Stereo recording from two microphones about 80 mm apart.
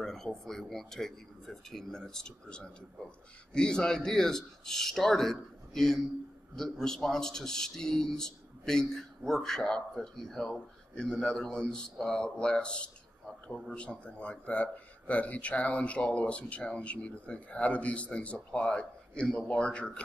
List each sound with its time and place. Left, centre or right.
0.0 s a man's voice: centre